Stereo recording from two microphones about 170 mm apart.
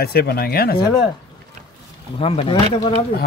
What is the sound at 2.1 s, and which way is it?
Speech, 35° left (ahead or behind).